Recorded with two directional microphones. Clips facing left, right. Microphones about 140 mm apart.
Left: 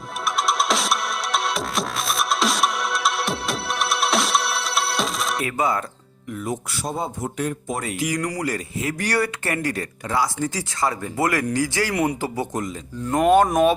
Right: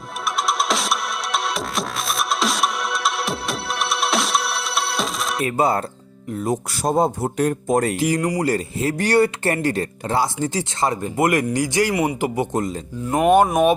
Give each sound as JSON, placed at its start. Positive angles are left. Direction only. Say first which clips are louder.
{"t": 0.4, "sound": "music", "louder": "even", "side_deg": 0}
{"t": 5.4, "sound": "speech", "louder": "right 5 dB", "side_deg": -30}
{"t": 7.9, "sound": "speech", "louder": "right 5 dB", "side_deg": -30}